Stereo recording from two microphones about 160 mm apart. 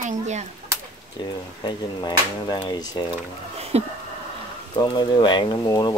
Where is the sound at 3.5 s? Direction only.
40° right (ahead or behind).